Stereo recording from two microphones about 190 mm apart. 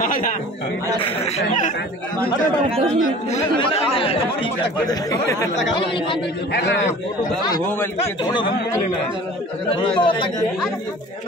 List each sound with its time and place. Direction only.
0.0 s a sound: 45° left (ahead or behind)
1.0 s speech: 35° left (ahead or behind)
3.3 s speech: 30° left (ahead or behind); by 5.5 s 15° left (ahead or behind)
6.5 s a man's voice: 70° left (ahead or behind)
7.4 s speech: 20° left (ahead or behind)
9.7 s speech: 25° left (ahead or behind)